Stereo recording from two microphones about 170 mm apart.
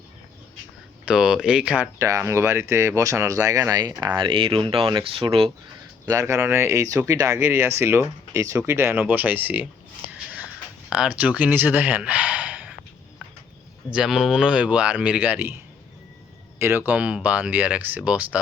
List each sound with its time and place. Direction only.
1.0 s speech: 5° right (ahead or behind)
2.0 s speech: 20° right (ahead or behind)
6.1 s speech: 20° right (ahead or behind)
10.8 s speech: 5° right (ahead or behind)
13.9 s speech: centre (ahead or behind)